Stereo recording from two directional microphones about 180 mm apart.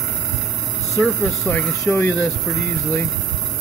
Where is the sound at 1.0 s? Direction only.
10° left (ahead or behind).